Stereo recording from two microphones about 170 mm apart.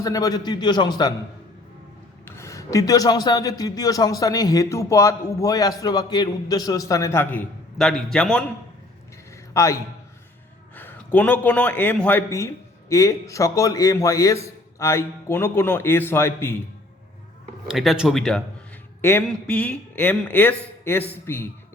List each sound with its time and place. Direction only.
0.0 s speech: 20° left (ahead or behind)
2.2 s speech: 15° left (ahead or behind)
9.5 s a man's voice: 15° left (ahead or behind)
10.8 s a man's voice: 10° left (ahead or behind)
17.7 s speech: 5° right (ahead or behind); by 21.4 s 15° left (ahead or behind)